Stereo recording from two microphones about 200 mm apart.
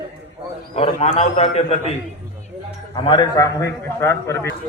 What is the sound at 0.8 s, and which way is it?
A man's voice, 30° left (ahead or behind).